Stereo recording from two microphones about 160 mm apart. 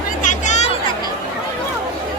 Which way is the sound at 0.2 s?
50° left (ahead or behind).